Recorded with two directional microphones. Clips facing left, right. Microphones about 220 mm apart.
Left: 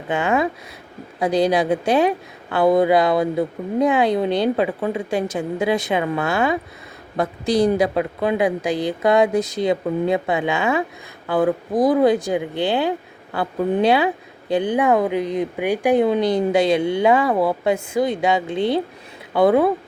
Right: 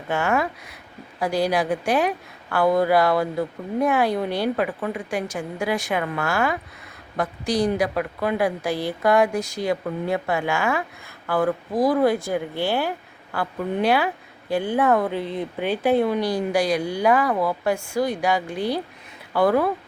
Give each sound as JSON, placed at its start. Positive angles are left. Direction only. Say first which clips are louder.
{"t": 0.1, "sound": "a woman's voice", "louder": "left 3 dB", "side_deg": 15}